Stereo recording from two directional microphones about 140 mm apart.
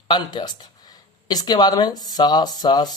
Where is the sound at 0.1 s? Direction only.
30° left (ahead or behind).